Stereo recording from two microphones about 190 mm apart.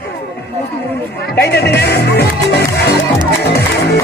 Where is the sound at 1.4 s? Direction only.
60° left (ahead or behind).